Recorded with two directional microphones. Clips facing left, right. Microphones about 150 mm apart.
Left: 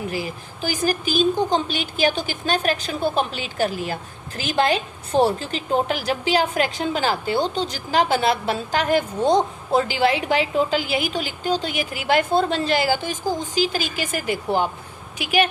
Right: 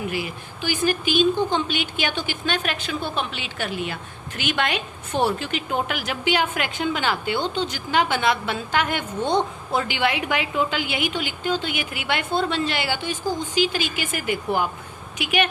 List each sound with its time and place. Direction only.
0.1 s a woman's voice: 35° left (ahead or behind)